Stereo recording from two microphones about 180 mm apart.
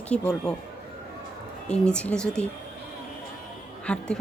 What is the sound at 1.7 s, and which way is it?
Speech, 5° left (ahead or behind).